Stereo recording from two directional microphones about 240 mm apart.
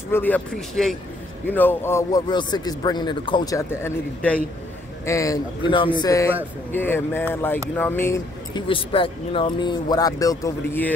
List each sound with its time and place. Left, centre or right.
0.1 s speech: centre